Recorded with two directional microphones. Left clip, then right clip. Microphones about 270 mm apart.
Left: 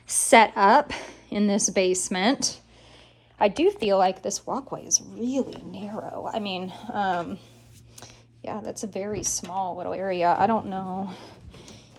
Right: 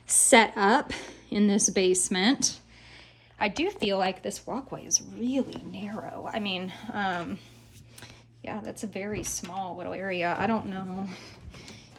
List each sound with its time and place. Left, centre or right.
0.1 s a woman's voice: left
3.8 s speech: centre